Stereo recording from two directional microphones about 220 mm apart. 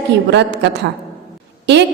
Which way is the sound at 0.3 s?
50° right (ahead or behind).